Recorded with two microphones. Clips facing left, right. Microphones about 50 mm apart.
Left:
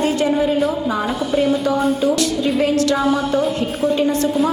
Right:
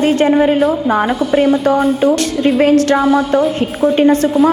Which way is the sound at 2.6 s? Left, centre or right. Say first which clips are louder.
Right 6 dB; right.